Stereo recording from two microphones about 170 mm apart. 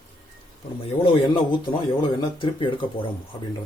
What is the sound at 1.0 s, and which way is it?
Speech, 30° left (ahead or behind).